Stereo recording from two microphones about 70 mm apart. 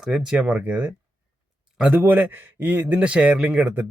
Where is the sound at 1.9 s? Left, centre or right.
Right.